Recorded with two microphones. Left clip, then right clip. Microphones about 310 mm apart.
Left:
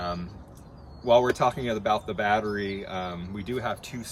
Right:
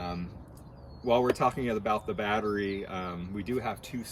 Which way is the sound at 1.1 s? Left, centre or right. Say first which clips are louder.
Left 5 dB; left.